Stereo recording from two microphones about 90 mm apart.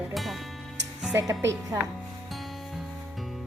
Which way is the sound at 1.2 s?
35° right (ahead or behind).